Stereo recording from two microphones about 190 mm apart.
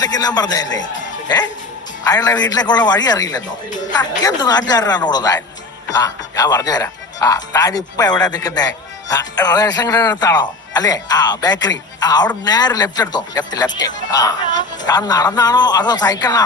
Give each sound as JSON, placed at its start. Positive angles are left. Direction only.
{"t": 0.0, "sound": "speech", "side_deg": 20}
{"t": 2.0, "sound": "speech", "side_deg": 20}